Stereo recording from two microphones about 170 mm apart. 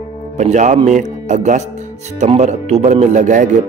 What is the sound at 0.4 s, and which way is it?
Speech, 45° right (ahead or behind).